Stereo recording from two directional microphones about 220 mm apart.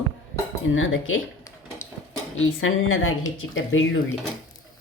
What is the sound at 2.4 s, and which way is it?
Speech, 65° left (ahead or behind).